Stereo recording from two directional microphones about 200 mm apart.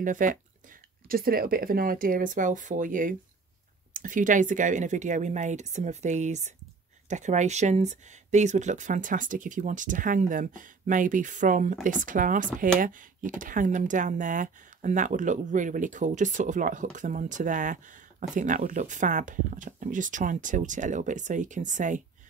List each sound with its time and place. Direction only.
0.0 s speech: 40° right (ahead or behind)